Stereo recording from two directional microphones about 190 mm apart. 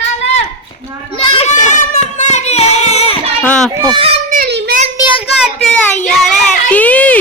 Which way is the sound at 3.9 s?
30° right (ahead or behind).